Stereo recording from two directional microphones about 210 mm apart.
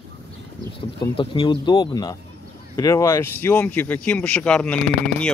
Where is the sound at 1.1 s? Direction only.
25° left (ahead or behind).